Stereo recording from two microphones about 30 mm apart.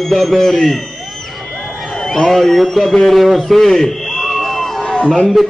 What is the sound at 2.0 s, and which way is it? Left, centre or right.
Speech, centre.